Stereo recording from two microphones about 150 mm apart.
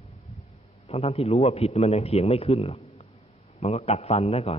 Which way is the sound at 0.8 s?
40° left (ahead or behind).